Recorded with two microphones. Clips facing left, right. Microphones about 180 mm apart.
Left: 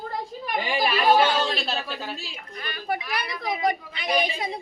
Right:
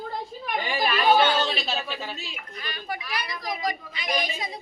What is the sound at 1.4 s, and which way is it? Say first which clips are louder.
Speech: left 1 dB; 5° right (ahead or behind).